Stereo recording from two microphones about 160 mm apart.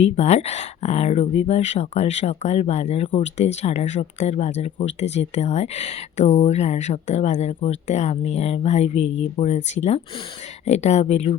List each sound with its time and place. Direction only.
0.0 s speech: 45° left (ahead or behind)